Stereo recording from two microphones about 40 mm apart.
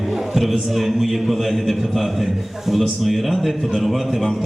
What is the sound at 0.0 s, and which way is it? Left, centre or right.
A man's voice, centre.